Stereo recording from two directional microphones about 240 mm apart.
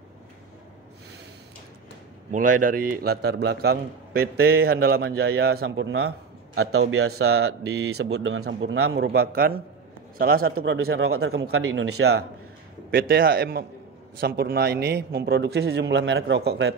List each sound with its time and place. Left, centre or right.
2.3 s a man's voice: right
7.2 s a man's voice: right
8.9 s a man's voice: right
11.1 s speech: right
12.9 s a man's voice: right